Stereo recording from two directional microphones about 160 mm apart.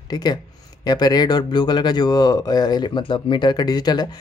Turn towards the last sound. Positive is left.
turn(degrees=25)  # may be behind; listen again after turning